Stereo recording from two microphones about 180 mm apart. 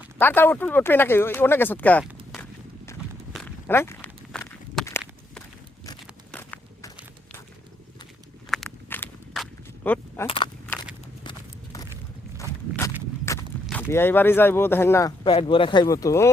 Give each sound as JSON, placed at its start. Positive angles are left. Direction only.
{"t": 0.2, "sound": "speech", "side_deg": 10}
{"t": 2.3, "sound": "walk", "side_deg": 15}
{"t": 4.3, "sound": "walk", "side_deg": 0}
{"t": 6.3, "sound": "walk", "side_deg": 10}
{"t": 8.4, "sound": "a sound", "side_deg": 0}
{"t": 10.2, "sound": "speech", "side_deg": 25}
{"t": 11.2, "sound": "horse", "side_deg": 20}
{"t": 13.3, "sound": "walk", "side_deg": 15}
{"t": 13.7, "sound": "speech", "side_deg": 10}
{"t": 15.2, "sound": "speech", "side_deg": 30}